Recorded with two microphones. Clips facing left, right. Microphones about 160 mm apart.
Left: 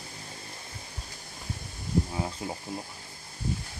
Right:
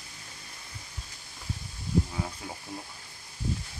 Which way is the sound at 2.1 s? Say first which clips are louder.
Left 3 dB; 25° left (ahead or behind).